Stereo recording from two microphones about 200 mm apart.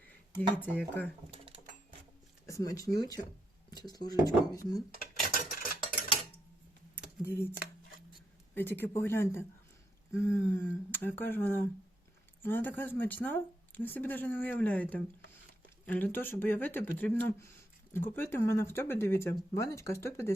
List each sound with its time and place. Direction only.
0.3 s speech: 10° left (ahead or behind)
2.5 s speech: 15° left (ahead or behind)
4.9 s ratchet: 45° left (ahead or behind)
6.9 s a sound: 10° left (ahead or behind)
8.9 s speech: 10° left (ahead or behind)